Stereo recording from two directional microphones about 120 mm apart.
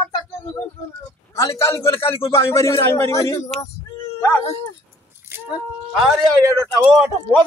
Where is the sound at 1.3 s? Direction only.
25° left (ahead or behind).